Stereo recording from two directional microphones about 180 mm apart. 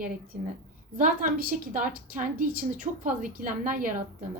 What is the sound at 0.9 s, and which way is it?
A woman's voice, 50° right (ahead or behind).